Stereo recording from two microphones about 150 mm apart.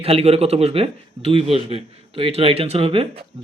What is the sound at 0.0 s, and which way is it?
Speech, 40° right (ahead or behind).